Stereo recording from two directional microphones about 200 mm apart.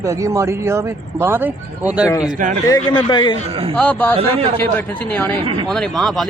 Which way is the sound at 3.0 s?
25° left (ahead or behind).